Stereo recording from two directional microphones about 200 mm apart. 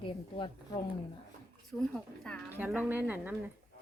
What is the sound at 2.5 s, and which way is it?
Speech, 10° right (ahead or behind).